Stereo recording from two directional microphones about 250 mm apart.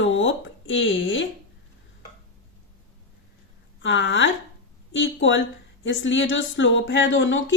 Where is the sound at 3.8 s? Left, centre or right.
Left.